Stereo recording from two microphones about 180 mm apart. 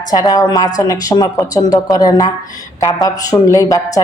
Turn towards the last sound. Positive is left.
turn(degrees=20)  # may be behind; listen again after turning